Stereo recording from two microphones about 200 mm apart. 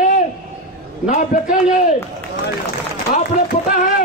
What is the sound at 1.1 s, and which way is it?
Speech, 40° left (ahead or behind).